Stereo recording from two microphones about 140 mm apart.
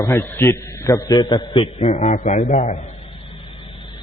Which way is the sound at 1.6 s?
50° left (ahead or behind).